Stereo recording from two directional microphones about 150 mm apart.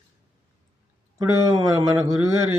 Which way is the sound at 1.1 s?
20° right (ahead or behind).